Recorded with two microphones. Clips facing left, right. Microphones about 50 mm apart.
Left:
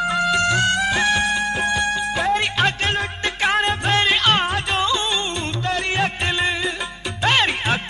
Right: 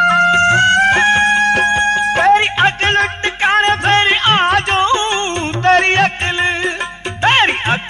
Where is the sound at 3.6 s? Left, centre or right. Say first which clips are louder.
Right 7 dB; right.